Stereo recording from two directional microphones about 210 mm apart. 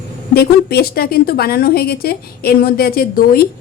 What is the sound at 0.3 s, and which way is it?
A woman's voice, 50° left (ahead or behind).